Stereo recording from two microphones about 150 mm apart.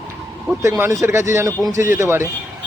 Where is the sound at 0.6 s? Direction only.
20° right (ahead or behind).